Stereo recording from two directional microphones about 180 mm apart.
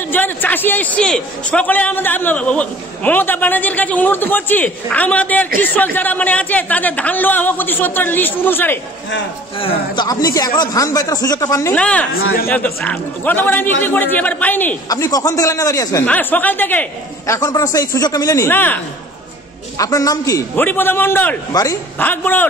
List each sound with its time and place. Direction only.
0.1 s a woman's voice: 10° left (ahead or behind)
9.6 s speech: 25° left (ahead or behind)
11.7 s a woman's voice: 10° left (ahead or behind)
14.9 s a woman's voice: 20° left (ahead or behind)
19.8 s a woman's voice: 20° left (ahead or behind)